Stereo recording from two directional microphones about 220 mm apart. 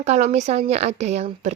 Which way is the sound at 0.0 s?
30° right (ahead or behind).